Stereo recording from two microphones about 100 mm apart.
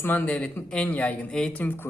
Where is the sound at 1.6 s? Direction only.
20° left (ahead or behind).